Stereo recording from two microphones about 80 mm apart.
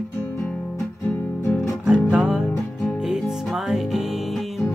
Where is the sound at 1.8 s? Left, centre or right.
Centre.